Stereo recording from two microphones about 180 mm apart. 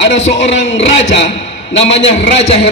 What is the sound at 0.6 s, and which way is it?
A man's voice, 40° left (ahead or behind).